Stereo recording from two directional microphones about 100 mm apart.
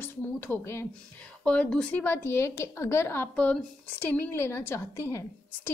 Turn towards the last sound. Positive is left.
turn(degrees=30)  # may be behind; listen again after turning